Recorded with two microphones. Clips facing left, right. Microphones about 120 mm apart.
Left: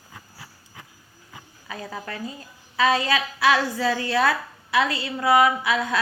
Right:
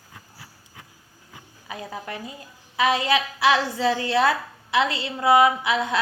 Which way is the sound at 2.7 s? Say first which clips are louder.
Even; 15° right (ahead or behind).